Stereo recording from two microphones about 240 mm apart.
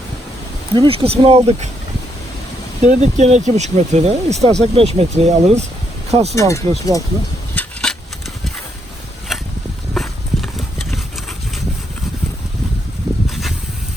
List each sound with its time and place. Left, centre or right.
0.8 s speech: right
2.8 s speech: right
6.3 s speech: centre
7.5 s a sound: centre
9.3 s a sound: centre
9.9 s horse: centre